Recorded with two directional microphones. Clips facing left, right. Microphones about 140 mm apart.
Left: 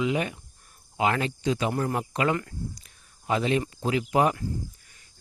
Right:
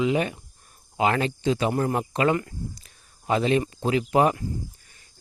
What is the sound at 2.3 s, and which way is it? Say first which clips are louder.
Speech: right 3 dB; 20° right (ahead or behind).